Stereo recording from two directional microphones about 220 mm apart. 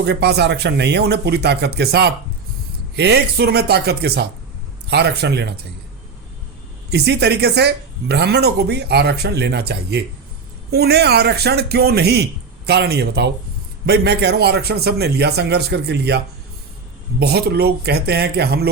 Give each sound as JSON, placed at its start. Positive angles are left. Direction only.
{"t": 0.0, "sound": "speech", "side_deg": -50}
{"t": 6.9, "sound": "speech", "side_deg": -50}